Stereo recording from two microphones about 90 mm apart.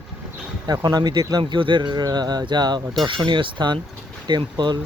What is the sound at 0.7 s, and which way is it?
Speech, 50° right (ahead or behind).